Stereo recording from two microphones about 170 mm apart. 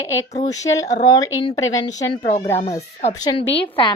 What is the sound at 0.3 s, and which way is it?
A woman's voice, 20° left (ahead or behind).